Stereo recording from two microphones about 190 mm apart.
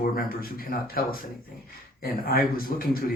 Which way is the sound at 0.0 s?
50° left (ahead or behind).